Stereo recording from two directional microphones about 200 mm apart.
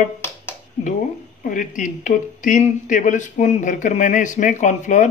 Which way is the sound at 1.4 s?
40° left (ahead or behind).